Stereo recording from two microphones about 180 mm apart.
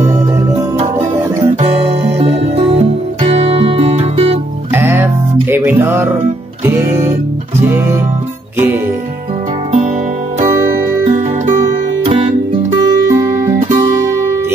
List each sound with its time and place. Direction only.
1.6 s music: 35° right (ahead or behind)
4.7 s music: 10° right (ahead or behind)
10.5 s music: 15° right (ahead or behind)
11.1 s music: 45° right (ahead or behind)
13.1 s music: 15° right (ahead or behind)